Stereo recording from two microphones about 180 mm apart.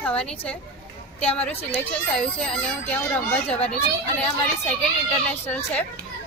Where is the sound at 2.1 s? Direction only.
5° left (ahead or behind).